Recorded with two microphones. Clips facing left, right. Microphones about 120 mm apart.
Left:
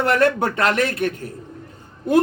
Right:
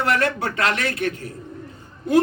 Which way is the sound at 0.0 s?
45° left (ahead or behind).